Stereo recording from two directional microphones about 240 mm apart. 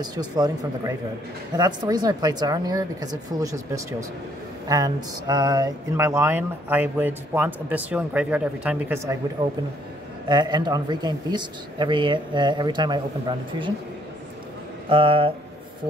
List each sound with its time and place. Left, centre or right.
0.0 s speech: centre
9.4 s speech: right
14.9 s speech: right